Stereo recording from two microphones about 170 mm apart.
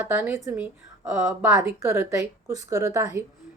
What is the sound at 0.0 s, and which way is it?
A woman's voice, 10° right (ahead or behind).